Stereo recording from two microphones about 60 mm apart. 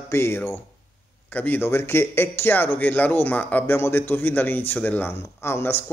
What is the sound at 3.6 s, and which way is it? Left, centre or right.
A man's voice, left.